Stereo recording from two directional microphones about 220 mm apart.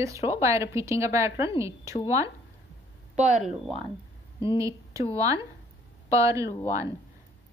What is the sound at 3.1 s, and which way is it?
Speech, 30° right (ahead or behind).